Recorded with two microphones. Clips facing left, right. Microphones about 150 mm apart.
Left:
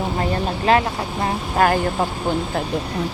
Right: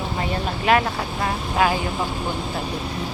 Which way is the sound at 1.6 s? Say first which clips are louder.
Left 3 dB; 45° left (ahead or behind).